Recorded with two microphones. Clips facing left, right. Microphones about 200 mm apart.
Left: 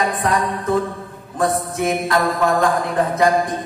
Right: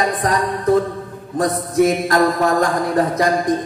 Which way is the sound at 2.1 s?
40° right (ahead or behind).